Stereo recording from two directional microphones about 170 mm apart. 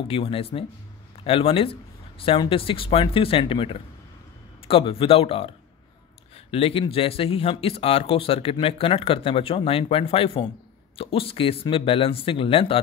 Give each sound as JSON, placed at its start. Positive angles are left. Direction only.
{"t": 0.1, "sound": "speech", "side_deg": 35}